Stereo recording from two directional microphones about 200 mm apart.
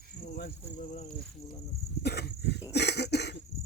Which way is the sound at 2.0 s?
55° left (ahead or behind).